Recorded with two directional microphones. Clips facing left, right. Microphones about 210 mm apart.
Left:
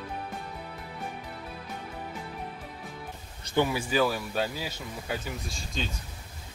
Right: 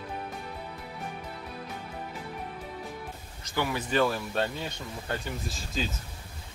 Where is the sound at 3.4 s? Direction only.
20° left (ahead or behind).